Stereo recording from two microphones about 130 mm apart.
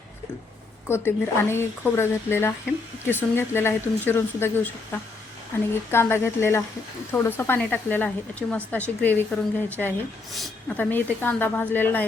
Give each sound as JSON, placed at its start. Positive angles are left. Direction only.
{"t": 0.9, "sound": "speech", "side_deg": 20}